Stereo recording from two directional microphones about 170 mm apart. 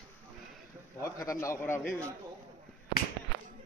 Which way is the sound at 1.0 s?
15° left (ahead or behind).